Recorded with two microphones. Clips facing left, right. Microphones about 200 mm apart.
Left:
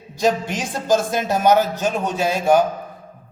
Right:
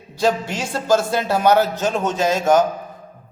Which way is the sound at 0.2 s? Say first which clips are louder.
Even; 15° left (ahead or behind).